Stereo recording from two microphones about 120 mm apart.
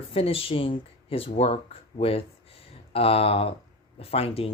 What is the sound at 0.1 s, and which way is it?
Speech, 50° left (ahead or behind).